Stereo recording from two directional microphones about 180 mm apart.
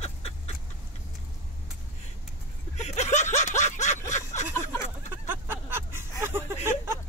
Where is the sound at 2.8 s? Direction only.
40° left (ahead or behind).